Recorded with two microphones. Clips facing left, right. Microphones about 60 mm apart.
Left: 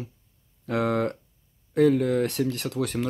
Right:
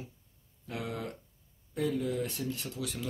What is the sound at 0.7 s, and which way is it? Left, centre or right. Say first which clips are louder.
Speech: left 13 dB; left.